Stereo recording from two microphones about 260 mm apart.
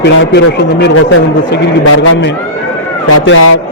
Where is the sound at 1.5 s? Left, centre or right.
Left.